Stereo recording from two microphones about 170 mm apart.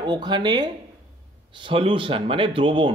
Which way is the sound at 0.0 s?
25° right (ahead or behind).